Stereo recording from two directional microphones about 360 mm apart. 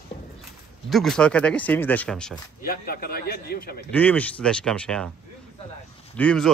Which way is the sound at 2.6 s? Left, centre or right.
Left.